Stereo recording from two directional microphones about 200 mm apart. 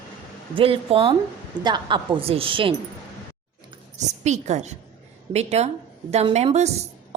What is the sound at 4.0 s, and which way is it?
A woman's voice, 35° right (ahead or behind).